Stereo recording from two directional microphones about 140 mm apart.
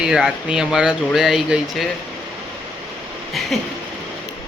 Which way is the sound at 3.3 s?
Centre (ahead or behind).